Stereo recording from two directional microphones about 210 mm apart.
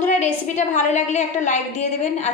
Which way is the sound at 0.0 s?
35° left (ahead or behind).